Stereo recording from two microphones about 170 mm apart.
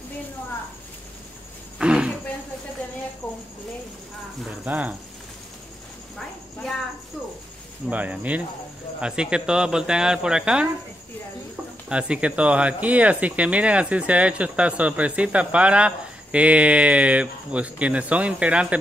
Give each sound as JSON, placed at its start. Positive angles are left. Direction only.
{"t": 1.8, "sound": "a sound", "side_deg": -5}
{"t": 4.5, "sound": "speech", "side_deg": -5}
{"t": 7.9, "sound": "speech", "side_deg": -10}
{"t": 11.9, "sound": "speech", "side_deg": -5}